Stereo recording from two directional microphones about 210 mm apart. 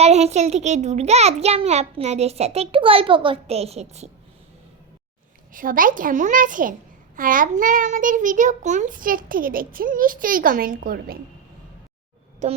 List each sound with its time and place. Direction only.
0.0 s a child's voice: 30° right (ahead or behind)
5.5 s a child's voice: 40° right (ahead or behind)
12.4 s a child's voice: 35° right (ahead or behind)